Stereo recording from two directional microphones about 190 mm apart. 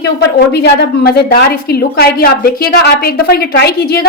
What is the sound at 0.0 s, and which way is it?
Speech, 60° left (ahead or behind).